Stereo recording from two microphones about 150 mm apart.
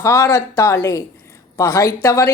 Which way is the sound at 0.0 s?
20° left (ahead or behind).